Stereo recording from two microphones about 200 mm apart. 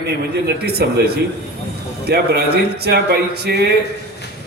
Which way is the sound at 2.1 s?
50° right (ahead or behind).